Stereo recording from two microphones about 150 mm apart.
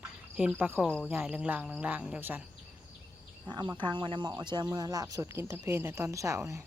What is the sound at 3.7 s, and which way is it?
Speech, 30° right (ahead or behind).